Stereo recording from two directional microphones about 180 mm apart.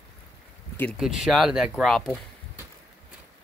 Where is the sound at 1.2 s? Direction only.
Centre (ahead or behind).